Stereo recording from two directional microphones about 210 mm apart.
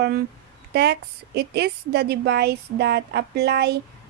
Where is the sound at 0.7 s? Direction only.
50° right (ahead or behind).